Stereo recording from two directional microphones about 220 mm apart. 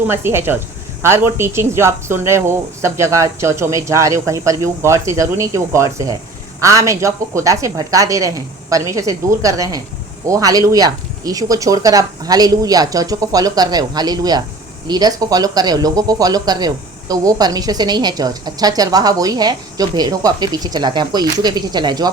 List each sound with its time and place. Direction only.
0.1 s speech: 10° right (ahead or behind)